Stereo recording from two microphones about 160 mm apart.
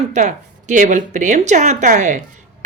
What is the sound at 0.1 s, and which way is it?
Speech, 50° right (ahead or behind).